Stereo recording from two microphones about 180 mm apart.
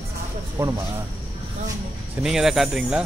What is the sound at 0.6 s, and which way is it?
Speech, 15° right (ahead or behind).